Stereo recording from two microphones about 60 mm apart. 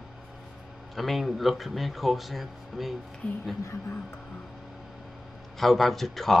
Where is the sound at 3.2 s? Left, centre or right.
Left.